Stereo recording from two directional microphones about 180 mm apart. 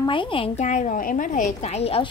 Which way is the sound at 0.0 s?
30° left (ahead or behind).